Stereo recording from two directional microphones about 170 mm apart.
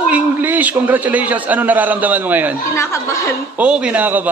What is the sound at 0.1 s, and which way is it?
A man's voice, 10° right (ahead or behind).